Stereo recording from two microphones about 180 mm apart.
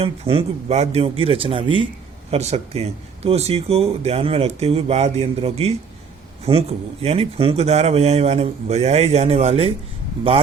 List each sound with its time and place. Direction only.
0.0 s speech: 30° right (ahead or behind)